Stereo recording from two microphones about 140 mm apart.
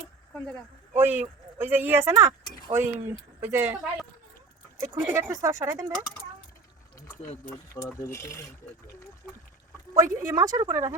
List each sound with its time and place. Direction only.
0.9 s speech: 15° right (ahead or behind)
4.8 s speech: 20° right (ahead or behind)
7.9 s speech: 20° left (ahead or behind)
9.9 s speech: 25° right (ahead or behind)